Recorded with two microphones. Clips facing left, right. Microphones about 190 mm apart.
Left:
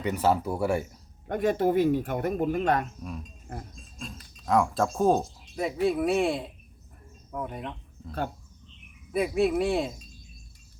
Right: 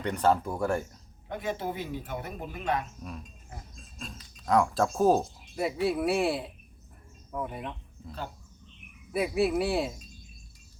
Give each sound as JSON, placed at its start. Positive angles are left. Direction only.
{"t": 0.0, "sound": "speech", "side_deg": 5}
{"t": 1.3, "sound": "speech", "side_deg": 50}
{"t": 3.0, "sound": "speech", "side_deg": 0}
{"t": 3.5, "sound": "a sound", "side_deg": 55}
{"t": 3.9, "sound": "speech", "side_deg": 0}
{"t": 9.1, "sound": "speech", "side_deg": -5}